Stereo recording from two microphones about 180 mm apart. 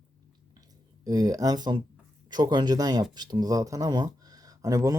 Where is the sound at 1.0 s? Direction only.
20° right (ahead or behind).